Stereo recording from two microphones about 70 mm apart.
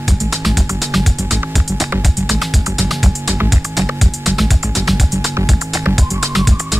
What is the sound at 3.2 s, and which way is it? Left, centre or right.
Music, right.